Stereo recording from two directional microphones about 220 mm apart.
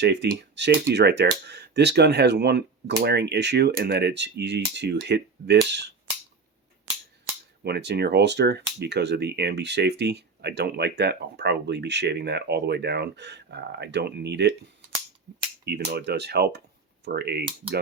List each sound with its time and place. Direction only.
0.0 s speech: 50° right (ahead or behind)
7.6 s speech: 50° right (ahead or behind)
15.6 s speech: 50° right (ahead or behind)